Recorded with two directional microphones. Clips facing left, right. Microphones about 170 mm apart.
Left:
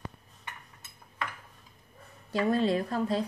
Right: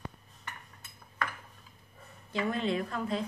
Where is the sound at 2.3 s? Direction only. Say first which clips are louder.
Left 5 dB; 35° left (ahead or behind).